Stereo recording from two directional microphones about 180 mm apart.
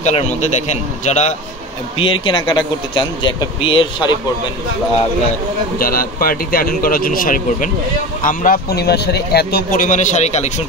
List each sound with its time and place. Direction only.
0.0 s speech: 40° left (ahead or behind)
2.0 s speech: 30° left (ahead or behind)
5.8 s a man's voice: 55° left (ahead or behind)